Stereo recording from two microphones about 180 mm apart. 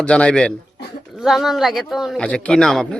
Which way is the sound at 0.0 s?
5° left (ahead or behind).